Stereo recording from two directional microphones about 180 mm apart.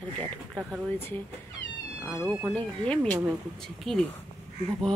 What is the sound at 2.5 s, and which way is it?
Speech, 5° left (ahead or behind).